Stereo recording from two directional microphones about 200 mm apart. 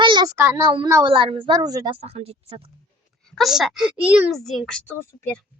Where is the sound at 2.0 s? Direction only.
30° right (ahead or behind).